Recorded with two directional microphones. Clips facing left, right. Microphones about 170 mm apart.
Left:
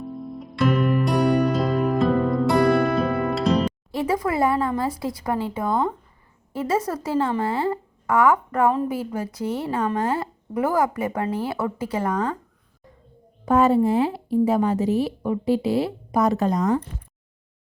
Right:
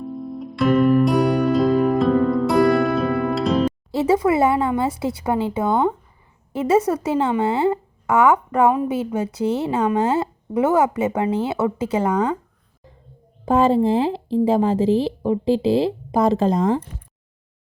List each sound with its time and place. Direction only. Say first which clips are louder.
0.0 s music: right 4 dB; centre (ahead or behind)
3.9 s speech: right 6 dB; 25° right (ahead or behind)
13.4 s speech: right 1 dB; 25° right (ahead or behind)